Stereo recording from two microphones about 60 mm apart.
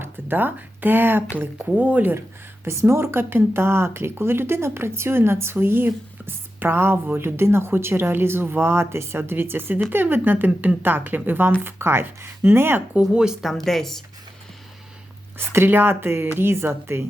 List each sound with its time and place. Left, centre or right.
0.0 s speech: right
2.6 s a woman's voice: right
13.1 s speech: centre
13.7 s speech: centre
15.4 s a woman's voice: right